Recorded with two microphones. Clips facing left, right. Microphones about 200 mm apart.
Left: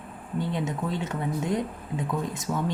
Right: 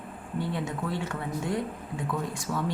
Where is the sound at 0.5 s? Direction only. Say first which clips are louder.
Left 2 dB; 20° left (ahead or behind).